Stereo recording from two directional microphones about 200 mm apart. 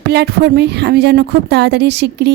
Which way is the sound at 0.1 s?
55° right (ahead or behind).